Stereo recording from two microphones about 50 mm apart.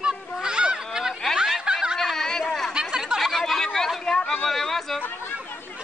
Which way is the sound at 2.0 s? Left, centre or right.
Centre.